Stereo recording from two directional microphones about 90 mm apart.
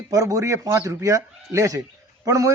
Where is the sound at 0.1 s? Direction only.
40° right (ahead or behind).